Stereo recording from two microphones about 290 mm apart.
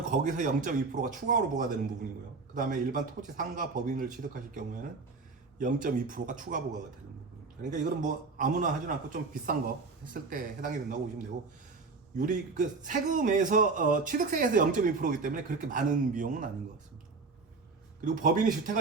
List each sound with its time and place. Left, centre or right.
0.1 s a man's voice: right
12.1 s a man's voice: right
18.0 s a man's voice: right